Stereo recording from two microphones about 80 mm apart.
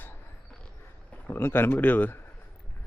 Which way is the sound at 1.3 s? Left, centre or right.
Left.